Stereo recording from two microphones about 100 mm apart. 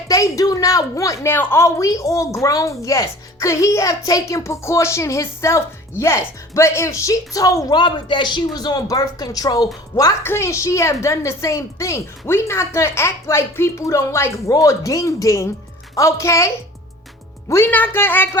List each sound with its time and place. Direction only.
0.1 s a woman's voice: 35° left (ahead or behind)
17.5 s a woman's voice: 20° left (ahead or behind)